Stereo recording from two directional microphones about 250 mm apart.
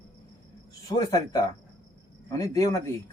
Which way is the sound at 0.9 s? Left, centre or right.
Centre.